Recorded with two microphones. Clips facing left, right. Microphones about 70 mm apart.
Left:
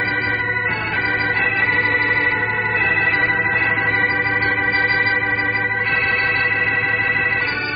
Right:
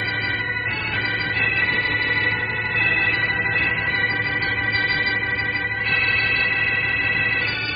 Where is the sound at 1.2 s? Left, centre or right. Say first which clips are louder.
Left 4 dB; left.